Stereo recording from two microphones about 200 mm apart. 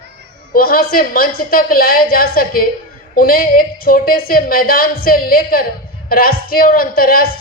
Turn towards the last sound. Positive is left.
turn(degrees=45)  # may be behind; listen again after turning